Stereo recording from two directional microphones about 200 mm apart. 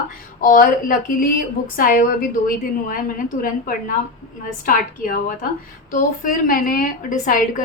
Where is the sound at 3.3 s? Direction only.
45° left (ahead or behind).